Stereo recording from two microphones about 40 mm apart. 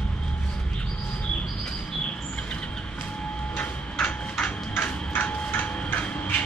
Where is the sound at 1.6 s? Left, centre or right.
Left.